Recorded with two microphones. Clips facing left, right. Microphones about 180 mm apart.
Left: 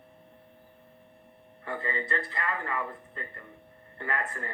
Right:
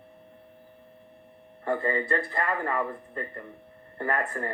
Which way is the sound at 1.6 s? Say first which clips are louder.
Right 7 dB; 45° right (ahead or behind).